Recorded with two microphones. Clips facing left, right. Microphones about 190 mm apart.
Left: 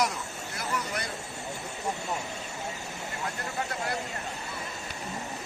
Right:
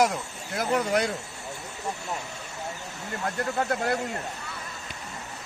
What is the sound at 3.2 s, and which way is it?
Speech, 55° right (ahead or behind).